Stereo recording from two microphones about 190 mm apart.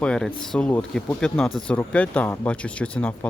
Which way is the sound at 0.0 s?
5° left (ahead or behind).